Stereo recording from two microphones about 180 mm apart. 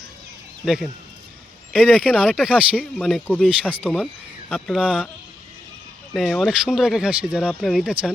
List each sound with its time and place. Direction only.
0.6 s speech: centre (ahead or behind)
6.1 s speech: centre (ahead or behind)